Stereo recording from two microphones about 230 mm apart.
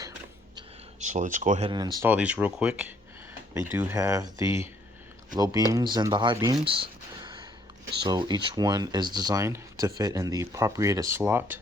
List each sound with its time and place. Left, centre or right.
0.9 s speech: right; by 4.7 s centre
5.7 s speech: centre